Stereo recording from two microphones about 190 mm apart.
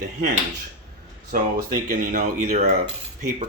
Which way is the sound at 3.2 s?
40° right (ahead or behind).